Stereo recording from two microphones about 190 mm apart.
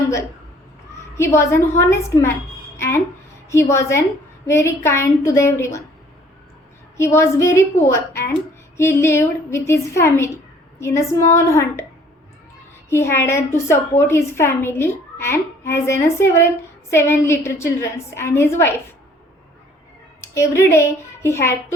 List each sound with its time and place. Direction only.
1.1 s a woman's voice: 15° left (ahead or behind)
6.9 s a woman's voice: 15° left (ahead or behind)
12.9 s a woman's voice: 15° left (ahead or behind)
20.2 s a woman's voice: 15° left (ahead or behind)